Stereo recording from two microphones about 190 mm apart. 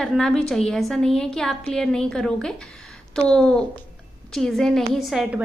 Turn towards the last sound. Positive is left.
turn(degrees=0)  # may be behind; listen again after turning